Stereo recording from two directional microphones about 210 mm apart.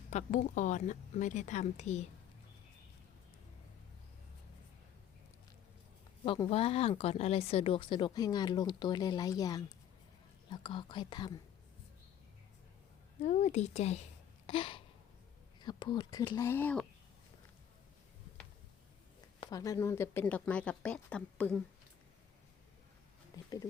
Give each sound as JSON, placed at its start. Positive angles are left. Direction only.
{"t": 0.1, "sound": "speech", "side_deg": 35}
{"t": 6.2, "sound": "speech", "side_deg": 25}
{"t": 13.2, "sound": "speech", "side_deg": 35}
{"t": 14.4, "sound": "a sound", "side_deg": 25}
{"t": 15.6, "sound": "speech", "side_deg": 20}
{"t": 19.4, "sound": "speech", "side_deg": 15}
{"t": 23.4, "sound": "a sound", "side_deg": 15}